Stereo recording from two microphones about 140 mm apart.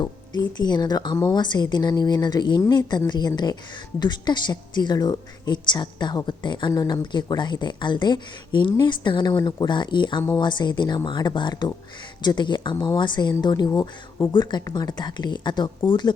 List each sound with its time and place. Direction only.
0.0 s speech: 30° left (ahead or behind)